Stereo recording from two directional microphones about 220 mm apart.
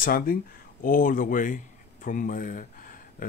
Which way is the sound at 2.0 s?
35° left (ahead or behind).